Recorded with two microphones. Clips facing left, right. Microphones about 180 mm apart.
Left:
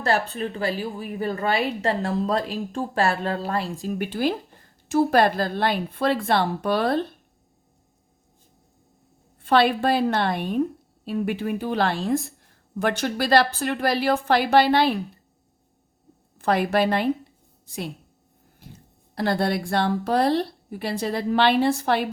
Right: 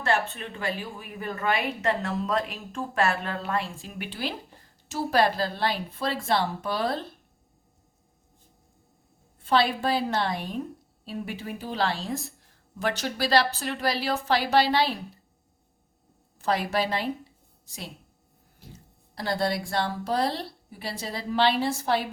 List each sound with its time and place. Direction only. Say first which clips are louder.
0.0 s a woman's voice: left 3 dB; 35° left (ahead or behind); by 7.0 s 60° left (ahead or behind)
9.4 s a woman's voice: left 5 dB; 60° left (ahead or behind)
16.4 s a woman's voice: left 5 dB; 60° left (ahead or behind)
19.1 s a woman's voice: left 4 dB; 60° left (ahead or behind)